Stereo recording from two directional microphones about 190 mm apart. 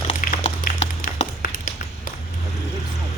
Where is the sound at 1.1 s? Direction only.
45° left (ahead or behind).